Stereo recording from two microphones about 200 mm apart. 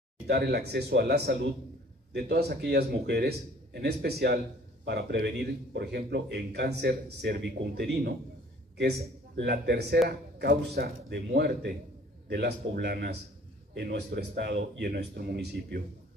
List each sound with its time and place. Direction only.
0.3 s a man's voice: 55° right (ahead or behind)
9.4 s a man's voice: 55° right (ahead or behind)